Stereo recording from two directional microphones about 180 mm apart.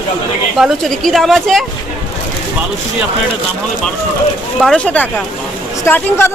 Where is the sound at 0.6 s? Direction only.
Centre (ahead or behind).